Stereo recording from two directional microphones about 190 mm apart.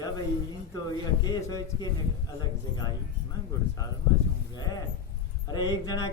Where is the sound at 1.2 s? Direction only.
20° left (ahead or behind).